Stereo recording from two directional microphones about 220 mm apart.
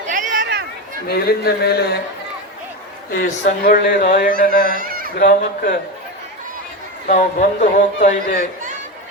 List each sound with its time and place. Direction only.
0.1 s a sound: 35° right (ahead or behind)
1.0 s speech: 45° left (ahead or behind)
3.2 s a man's voice: 40° left (ahead or behind)
4.8 s a sound: 40° right (ahead or behind)
5.1 s speech: 50° left (ahead or behind)
7.1 s a man's voice: 35° left (ahead or behind)